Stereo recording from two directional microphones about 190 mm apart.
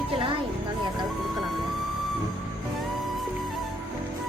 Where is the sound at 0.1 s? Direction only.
25° right (ahead or behind).